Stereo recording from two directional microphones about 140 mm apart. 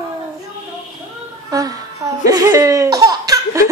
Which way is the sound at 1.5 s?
25° right (ahead or behind).